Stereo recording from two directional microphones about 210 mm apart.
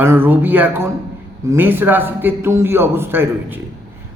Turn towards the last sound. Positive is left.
turn(degrees=-10)  # may be behind; listen again after turning